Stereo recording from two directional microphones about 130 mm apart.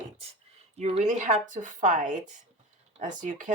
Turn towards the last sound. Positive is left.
turn(degrees=-80)